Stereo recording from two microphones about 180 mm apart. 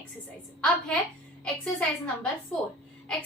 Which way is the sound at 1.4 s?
5° left (ahead or behind).